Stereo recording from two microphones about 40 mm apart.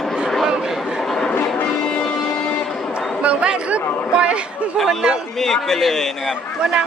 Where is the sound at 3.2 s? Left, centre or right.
Right.